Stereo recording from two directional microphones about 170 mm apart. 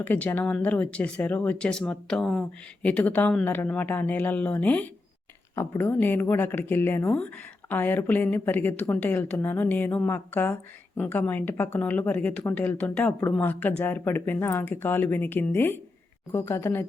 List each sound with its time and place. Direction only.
0.0 s a woman's voice: 10° left (ahead or behind)